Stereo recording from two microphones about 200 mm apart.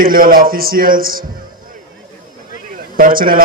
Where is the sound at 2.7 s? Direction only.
45° right (ahead or behind).